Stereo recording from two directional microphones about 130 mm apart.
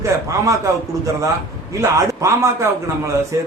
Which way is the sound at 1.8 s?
20° right (ahead or behind).